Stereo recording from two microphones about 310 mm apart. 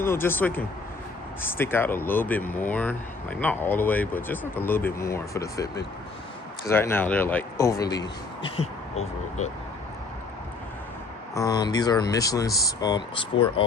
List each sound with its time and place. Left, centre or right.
0.0 s speech: centre
11.3 s speech: centre